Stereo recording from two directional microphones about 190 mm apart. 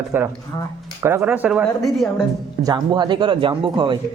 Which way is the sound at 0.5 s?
15° left (ahead or behind).